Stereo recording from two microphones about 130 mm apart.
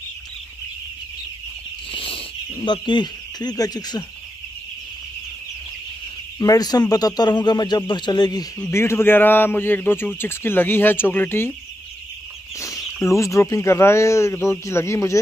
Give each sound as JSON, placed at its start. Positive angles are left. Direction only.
{"t": 1.9, "sound": "a sound", "side_deg": 45}
{"t": 6.4, "sound": "a man's voice", "side_deg": 30}
{"t": 8.6, "sound": "a man's voice", "side_deg": 20}
{"t": 12.5, "sound": "speech", "side_deg": 25}